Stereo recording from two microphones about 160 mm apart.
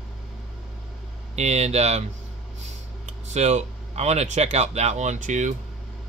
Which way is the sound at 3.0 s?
45° right (ahead or behind).